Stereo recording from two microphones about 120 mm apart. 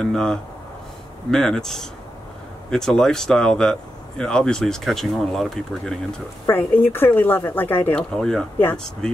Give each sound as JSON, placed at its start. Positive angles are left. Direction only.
{"t": 0.0, "sound": "speech", "side_deg": 5}
{"t": 6.4, "sound": "speech", "side_deg": 15}